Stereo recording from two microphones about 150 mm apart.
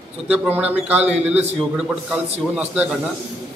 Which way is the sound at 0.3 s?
10° right (ahead or behind).